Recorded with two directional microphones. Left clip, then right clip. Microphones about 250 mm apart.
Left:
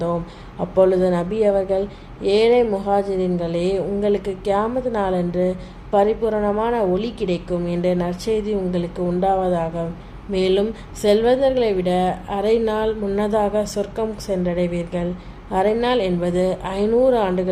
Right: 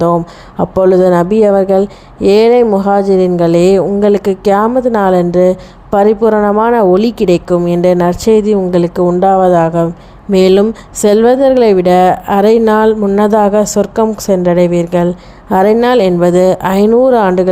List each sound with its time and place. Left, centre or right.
0.6 s a woman's voice: right